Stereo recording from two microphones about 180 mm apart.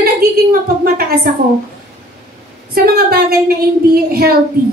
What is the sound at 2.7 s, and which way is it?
Speech, 60° right (ahead or behind).